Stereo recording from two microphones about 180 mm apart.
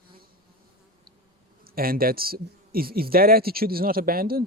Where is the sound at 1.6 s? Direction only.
55° right (ahead or behind).